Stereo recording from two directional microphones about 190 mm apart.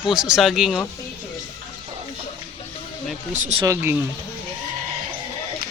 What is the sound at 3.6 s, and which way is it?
Speech, 10° right (ahead or behind).